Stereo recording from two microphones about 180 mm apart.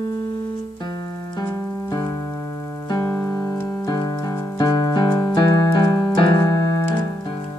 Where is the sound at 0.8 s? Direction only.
25° left (ahead or behind).